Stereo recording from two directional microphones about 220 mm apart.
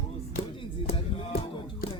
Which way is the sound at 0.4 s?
40° left (ahead or behind).